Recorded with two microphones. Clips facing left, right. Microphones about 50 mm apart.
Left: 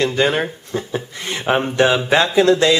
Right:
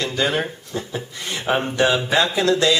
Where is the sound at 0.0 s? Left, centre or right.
Left.